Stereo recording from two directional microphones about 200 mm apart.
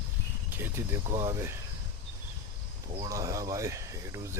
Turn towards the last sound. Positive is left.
turn(degrees=-15)  # may be behind; listen again after turning